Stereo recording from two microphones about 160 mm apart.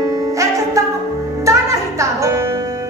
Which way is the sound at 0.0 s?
20° right (ahead or behind).